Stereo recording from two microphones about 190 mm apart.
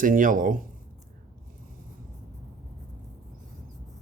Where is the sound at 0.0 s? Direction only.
45° right (ahead or behind).